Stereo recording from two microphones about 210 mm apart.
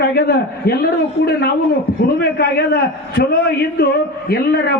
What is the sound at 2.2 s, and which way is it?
A man's voice, 50° left (ahead or behind).